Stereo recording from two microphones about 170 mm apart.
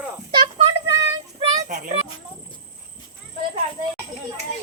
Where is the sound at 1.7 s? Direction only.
45° right (ahead or behind).